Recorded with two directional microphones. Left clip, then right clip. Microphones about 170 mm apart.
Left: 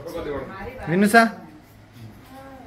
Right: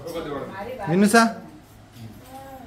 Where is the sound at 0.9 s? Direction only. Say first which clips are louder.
Left 2 dB; 15° right (ahead or behind).